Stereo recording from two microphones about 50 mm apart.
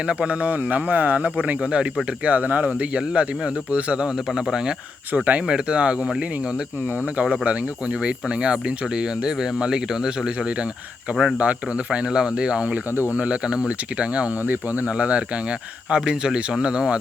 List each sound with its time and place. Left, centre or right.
0.0 s speech: right
5.1 s speech: right
5.5 s speech: centre
14.4 s speech: right
14.8 s speech: right